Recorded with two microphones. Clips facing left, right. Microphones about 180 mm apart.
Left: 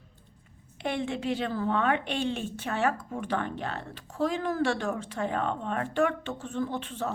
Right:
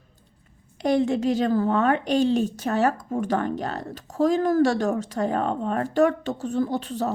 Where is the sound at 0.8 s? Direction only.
40° right (ahead or behind).